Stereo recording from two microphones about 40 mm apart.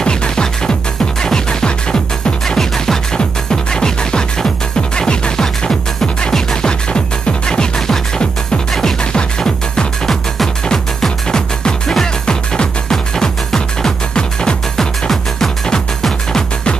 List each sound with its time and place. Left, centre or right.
0.0 s music: left
2.4 s music: centre
9.1 s music: centre
12.9 s music: centre
14.8 s music: centre